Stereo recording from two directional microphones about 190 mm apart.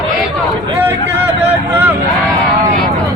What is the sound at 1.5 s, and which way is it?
Speech, 10° right (ahead or behind).